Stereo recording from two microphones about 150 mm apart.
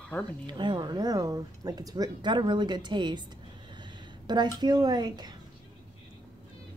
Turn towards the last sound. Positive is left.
turn(degrees=-25)  # may be behind; listen again after turning